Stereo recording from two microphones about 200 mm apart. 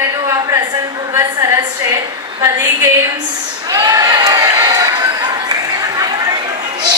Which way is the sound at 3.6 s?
20° right (ahead or behind).